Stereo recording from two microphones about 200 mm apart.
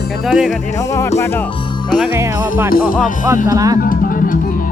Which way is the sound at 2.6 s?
45° left (ahead or behind).